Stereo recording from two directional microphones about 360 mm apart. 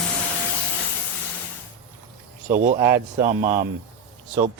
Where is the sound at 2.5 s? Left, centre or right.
Right.